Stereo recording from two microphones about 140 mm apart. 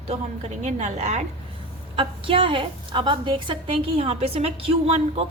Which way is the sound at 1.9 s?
40° right (ahead or behind).